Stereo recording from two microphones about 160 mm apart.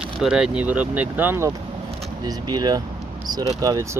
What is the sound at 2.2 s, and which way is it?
Speech, 25° right (ahead or behind).